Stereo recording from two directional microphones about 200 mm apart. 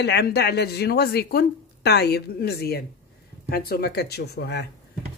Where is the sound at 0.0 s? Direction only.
55° left (ahead or behind).